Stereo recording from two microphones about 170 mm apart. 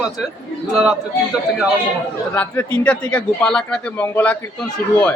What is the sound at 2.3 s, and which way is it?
A man's voice, 10° left (ahead or behind).